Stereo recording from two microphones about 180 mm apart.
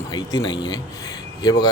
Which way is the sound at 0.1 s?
20° left (ahead or behind).